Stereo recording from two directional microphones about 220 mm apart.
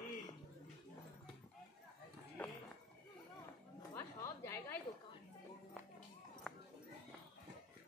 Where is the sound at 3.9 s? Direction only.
10° left (ahead or behind).